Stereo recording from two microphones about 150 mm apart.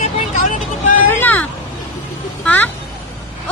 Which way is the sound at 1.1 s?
15° left (ahead or behind).